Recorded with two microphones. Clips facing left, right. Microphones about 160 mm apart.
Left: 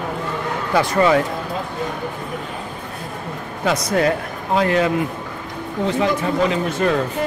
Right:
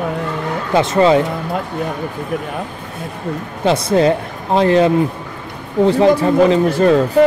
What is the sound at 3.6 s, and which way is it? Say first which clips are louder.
Speech: right 5 dB; 25° right (ahead or behind).